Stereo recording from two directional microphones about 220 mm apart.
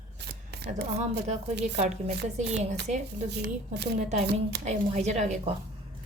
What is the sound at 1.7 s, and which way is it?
Speech, 30° right (ahead or behind).